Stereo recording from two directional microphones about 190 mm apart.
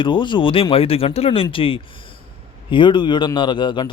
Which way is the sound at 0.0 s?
25° left (ahead or behind).